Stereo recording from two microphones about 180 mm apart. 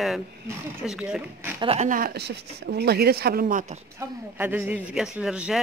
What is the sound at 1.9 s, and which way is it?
Speech, 55° right (ahead or behind).